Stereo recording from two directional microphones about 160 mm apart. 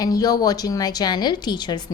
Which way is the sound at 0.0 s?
25° left (ahead or behind).